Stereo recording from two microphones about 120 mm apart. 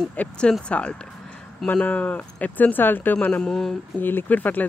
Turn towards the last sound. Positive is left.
turn(degrees=15)  # may be behind; listen again after turning